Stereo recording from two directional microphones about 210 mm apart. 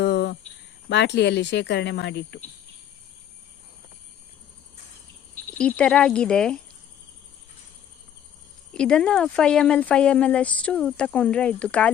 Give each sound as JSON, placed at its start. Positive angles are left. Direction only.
{"t": 0.0, "sound": "cricket", "side_deg": 55}
{"t": 0.9, "sound": "speech", "side_deg": 55}
{"t": 5.3, "sound": "speech", "side_deg": 5}
{"t": 8.7, "sound": "speech", "side_deg": 5}